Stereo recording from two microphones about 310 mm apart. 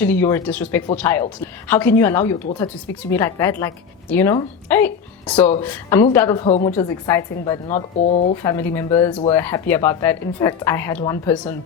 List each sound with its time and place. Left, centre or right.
0.0 s a woman's voice: centre
6.4 s speech: left
6.7 s a woman's voice: centre